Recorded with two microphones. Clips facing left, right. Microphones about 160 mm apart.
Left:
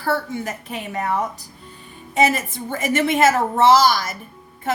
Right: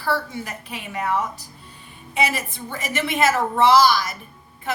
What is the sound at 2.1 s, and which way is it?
A woman's voice, 45° left (ahead or behind).